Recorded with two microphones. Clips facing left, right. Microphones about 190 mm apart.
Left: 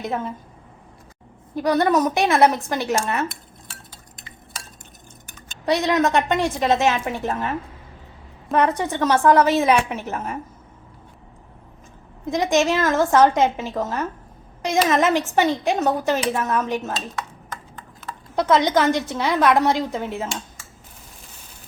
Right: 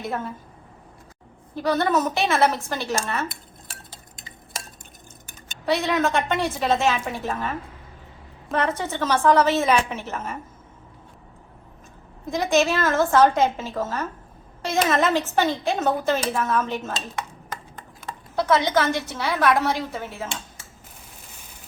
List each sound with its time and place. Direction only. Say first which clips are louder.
0.0 s a woman's voice: left 3 dB; 20° left (ahead or behind)
1.5 s a woman's voice: left 3 dB; 15° left (ahead or behind)
5.6 s a woman's voice: left 3 dB; 15° left (ahead or behind)
8.7 s a woman's voice: left 4 dB; 15° left (ahead or behind)
12.3 s a woman's voice: left 2 dB; 15° left (ahead or behind)
18.3 s a woman's voice: left 3 dB; 15° left (ahead or behind)